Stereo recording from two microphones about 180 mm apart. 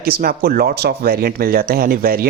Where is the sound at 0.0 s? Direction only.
55° right (ahead or behind).